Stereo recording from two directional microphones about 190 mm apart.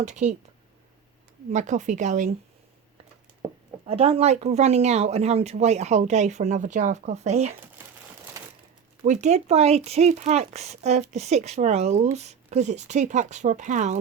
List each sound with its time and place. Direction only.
0.0 s speech: 40° right (ahead or behind)
1.5 s speech: 40° right (ahead or behind)
3.8 s speech: 30° right (ahead or behind)
9.0 s speech: 35° right (ahead or behind)